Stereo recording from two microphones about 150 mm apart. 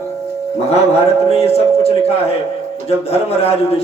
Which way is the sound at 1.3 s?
40° left (ahead or behind).